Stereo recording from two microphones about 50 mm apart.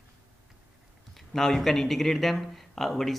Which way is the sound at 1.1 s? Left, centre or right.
Centre.